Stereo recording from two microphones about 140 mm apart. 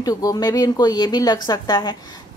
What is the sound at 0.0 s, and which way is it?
A woman's voice, 25° left (ahead or behind).